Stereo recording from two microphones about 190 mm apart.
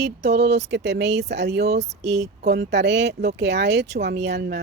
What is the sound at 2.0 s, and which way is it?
A woman's voice, 60° right (ahead or behind).